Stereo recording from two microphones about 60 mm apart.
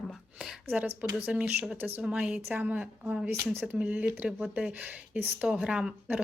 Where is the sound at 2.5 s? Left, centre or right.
Right.